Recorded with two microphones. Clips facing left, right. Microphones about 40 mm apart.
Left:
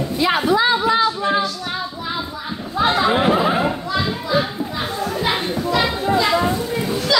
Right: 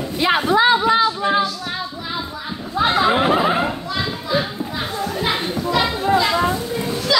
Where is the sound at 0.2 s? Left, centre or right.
Right.